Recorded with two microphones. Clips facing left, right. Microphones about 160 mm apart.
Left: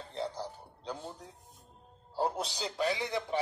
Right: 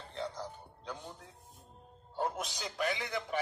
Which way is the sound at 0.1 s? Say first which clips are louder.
Left 2 dB; 35° left (ahead or behind).